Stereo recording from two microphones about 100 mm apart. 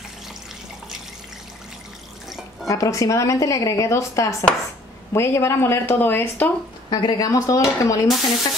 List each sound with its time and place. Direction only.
2.2 s drip: centre (ahead or behind)
2.7 s speech: 35° left (ahead or behind)
6.9 s speech: 45° left (ahead or behind)